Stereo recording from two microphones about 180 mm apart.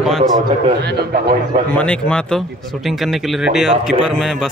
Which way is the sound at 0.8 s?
60° right (ahead or behind).